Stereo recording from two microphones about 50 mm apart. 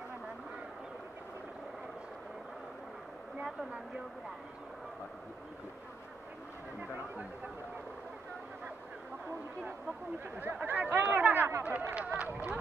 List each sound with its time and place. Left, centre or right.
10.4 s speech: right
11.6 s speech: right